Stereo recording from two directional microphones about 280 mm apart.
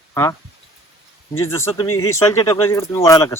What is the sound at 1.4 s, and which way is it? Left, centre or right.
Speech, centre.